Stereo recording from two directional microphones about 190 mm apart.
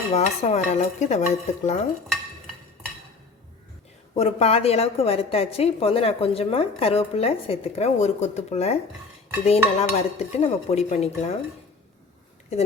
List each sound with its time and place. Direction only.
0.1 s a woman's voice: 35° left (ahead or behind)
4.1 s a woman's voice: 35° left (ahead or behind)